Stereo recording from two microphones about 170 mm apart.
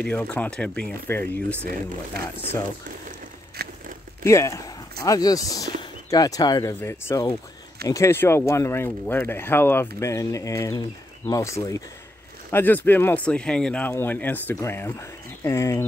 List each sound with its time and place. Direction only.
0.0 s speech: 10° left (ahead or behind)
3.6 s crumpling: 65° right (ahead or behind)
4.2 s speech: 15° left (ahead or behind)